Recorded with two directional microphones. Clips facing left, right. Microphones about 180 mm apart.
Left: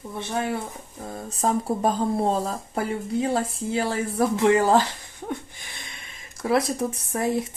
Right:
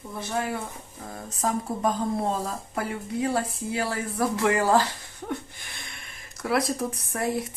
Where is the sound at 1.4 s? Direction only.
30° left (ahead or behind).